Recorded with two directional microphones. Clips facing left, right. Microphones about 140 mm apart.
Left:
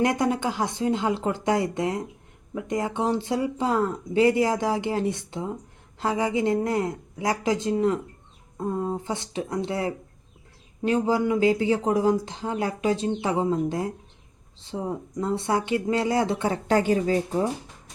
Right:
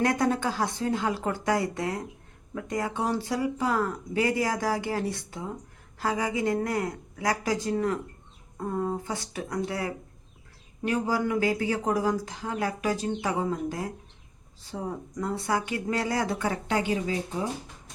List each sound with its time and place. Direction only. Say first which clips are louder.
0.0 s speech: left 2 dB; 15° left (ahead or behind)
16.6 s speech: left 8 dB; 40° left (ahead or behind)